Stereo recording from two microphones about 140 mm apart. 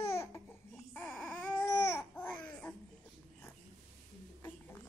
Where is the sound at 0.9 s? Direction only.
5° left (ahead or behind).